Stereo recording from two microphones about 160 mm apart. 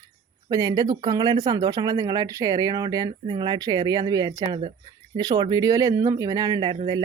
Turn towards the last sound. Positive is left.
turn(degrees=-30)  # may be behind; listen again after turning